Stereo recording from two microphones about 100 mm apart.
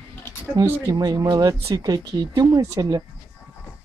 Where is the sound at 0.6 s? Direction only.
40° right (ahead or behind).